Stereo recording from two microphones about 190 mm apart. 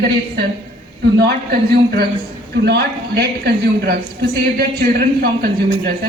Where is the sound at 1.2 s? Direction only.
55° right (ahead or behind).